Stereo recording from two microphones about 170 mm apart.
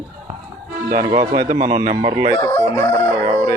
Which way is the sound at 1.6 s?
25° right (ahead or behind).